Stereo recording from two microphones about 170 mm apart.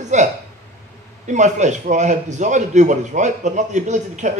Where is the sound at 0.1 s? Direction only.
45° right (ahead or behind).